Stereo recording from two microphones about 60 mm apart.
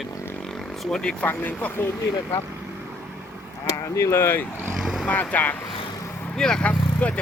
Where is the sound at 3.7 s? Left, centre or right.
Left.